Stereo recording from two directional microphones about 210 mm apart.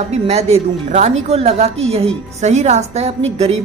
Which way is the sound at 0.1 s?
30° right (ahead or behind).